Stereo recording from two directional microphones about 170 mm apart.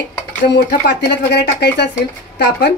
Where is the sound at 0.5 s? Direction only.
85° left.